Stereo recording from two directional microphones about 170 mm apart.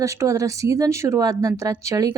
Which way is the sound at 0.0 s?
20° right (ahead or behind).